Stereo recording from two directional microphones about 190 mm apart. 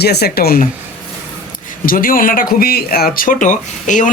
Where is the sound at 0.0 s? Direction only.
55° left (ahead or behind).